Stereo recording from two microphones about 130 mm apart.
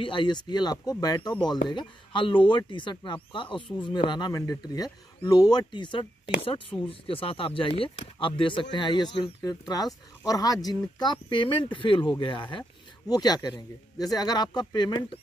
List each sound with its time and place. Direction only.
0.0 s speech: 40° left (ahead or behind)